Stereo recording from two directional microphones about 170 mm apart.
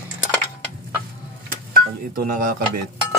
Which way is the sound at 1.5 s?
60° right (ahead or behind).